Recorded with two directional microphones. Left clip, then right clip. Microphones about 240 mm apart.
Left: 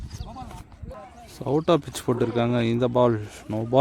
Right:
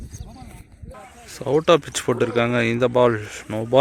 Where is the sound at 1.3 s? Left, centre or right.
Centre.